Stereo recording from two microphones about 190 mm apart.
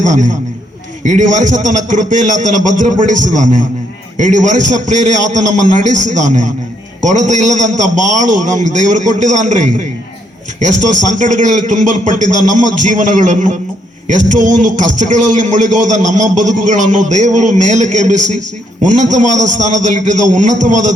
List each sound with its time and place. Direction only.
0.0 s a man's voice: 40° right (ahead or behind)